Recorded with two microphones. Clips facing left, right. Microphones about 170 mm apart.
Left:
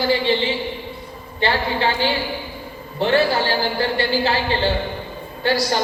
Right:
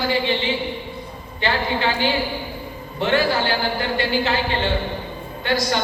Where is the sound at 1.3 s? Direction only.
35° left (ahead or behind).